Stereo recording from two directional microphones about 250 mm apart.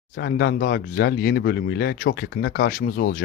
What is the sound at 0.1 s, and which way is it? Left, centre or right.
Speech, left.